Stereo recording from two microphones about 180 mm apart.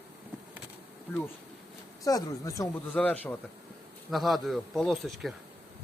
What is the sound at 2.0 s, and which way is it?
Speech, 20° left (ahead or behind).